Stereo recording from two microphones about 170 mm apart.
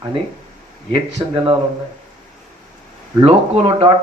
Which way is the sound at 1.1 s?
30° right (ahead or behind).